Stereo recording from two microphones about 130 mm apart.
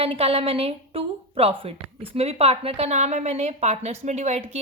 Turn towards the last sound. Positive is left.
turn(degrees=-55)  # may be behind; listen again after turning